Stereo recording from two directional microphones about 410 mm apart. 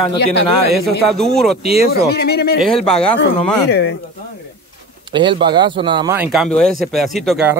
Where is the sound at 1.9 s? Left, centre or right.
Left.